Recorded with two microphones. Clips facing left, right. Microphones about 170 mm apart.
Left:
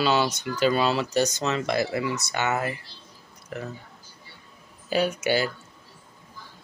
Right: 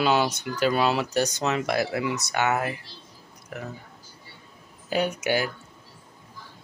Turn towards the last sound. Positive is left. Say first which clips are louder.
# left 1 dB
turn(degrees=-15)  # may be behind; listen again after turning